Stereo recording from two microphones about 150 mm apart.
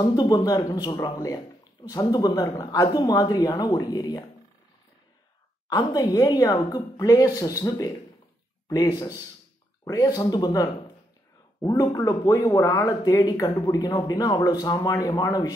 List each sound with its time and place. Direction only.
0.0 s speech: 25° left (ahead or behind)
5.7 s speech: 25° left (ahead or behind)